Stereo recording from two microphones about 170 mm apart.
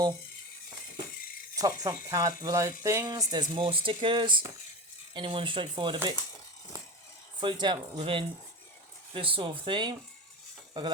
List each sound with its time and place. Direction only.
1.5 s speech: 20° right (ahead or behind)
7.3 s speech: 25° right (ahead or behind)